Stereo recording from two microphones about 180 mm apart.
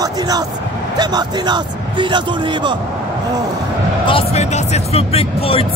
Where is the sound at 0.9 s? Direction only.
25° right (ahead or behind).